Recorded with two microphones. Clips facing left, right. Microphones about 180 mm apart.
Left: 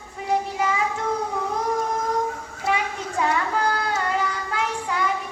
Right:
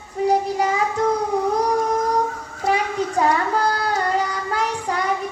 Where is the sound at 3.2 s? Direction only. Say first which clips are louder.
Right 3 dB; 40° right (ahead or behind).